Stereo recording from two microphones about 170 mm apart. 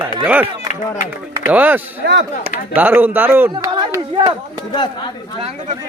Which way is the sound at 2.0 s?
85° right.